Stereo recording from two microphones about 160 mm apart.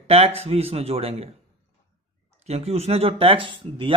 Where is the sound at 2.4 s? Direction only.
40° right (ahead or behind).